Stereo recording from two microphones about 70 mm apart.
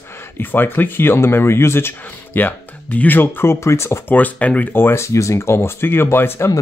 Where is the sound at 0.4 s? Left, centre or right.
Left.